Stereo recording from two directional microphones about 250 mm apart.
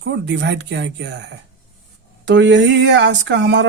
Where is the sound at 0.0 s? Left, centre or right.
Right.